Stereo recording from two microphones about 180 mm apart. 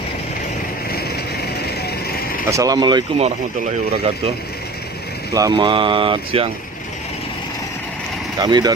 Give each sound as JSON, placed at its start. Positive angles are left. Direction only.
{"t": 2.5, "sound": "speech", "side_deg": -20}
{"t": 5.3, "sound": "speech", "side_deg": -20}
{"t": 8.4, "sound": "speech", "side_deg": -20}